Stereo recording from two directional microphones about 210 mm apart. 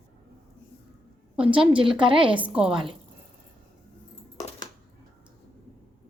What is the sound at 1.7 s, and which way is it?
Speech, 25° right (ahead or behind).